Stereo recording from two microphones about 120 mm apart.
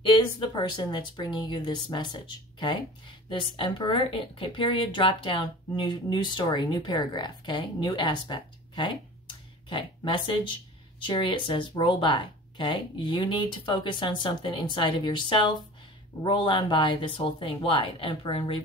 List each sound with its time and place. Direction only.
0.0 s speech: 40° left (ahead or behind)